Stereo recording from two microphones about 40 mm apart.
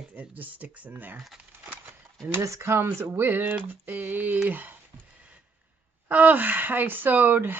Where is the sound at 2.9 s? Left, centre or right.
Right.